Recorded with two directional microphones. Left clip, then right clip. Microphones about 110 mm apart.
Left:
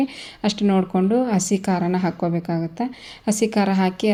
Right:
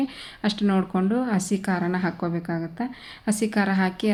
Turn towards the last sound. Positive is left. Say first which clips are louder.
# left 4 dB
turn(degrees=30)  # may be behind; listen again after turning